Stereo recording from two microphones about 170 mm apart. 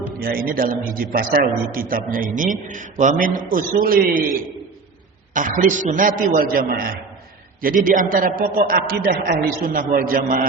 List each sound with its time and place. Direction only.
0.2 s a man's voice: 60° right (ahead or behind)
5.3 s a man's voice: 50° right (ahead or behind)